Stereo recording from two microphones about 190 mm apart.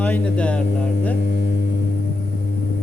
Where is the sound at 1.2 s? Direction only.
55° left (ahead or behind).